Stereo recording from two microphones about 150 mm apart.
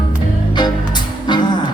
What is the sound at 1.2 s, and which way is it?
Music, 30° left (ahead or behind).